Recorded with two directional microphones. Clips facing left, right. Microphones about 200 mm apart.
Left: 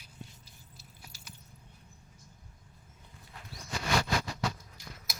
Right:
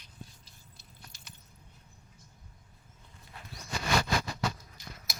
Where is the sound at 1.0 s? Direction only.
5° left (ahead or behind).